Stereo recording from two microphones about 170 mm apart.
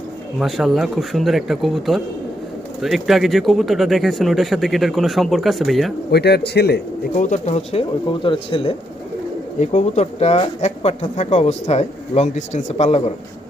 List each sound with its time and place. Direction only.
0.3 s speech: centre (ahead or behind)
6.1 s speech: 75° left (ahead or behind)
7.2 s speech: 40° left (ahead or behind)